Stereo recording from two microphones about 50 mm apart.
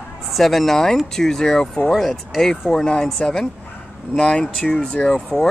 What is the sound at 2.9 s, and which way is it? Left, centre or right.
Speech, centre.